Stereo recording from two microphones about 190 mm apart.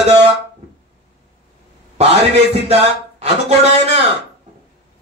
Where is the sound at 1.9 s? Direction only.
35° right (ahead or behind).